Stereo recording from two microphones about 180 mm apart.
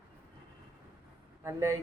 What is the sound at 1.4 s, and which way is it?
Speech, 15° right (ahead or behind).